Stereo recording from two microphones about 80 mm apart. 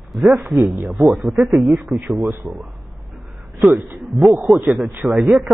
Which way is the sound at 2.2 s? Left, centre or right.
Right.